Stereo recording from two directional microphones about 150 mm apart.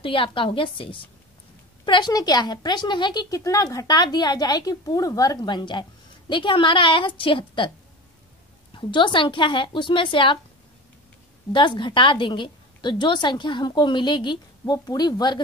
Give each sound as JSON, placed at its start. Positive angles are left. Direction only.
{"t": 0.0, "sound": "a woman's voice", "side_deg": 35}
{"t": 8.7, "sound": "a woman's voice", "side_deg": 30}
{"t": 11.5, "sound": "a woman's voice", "side_deg": 30}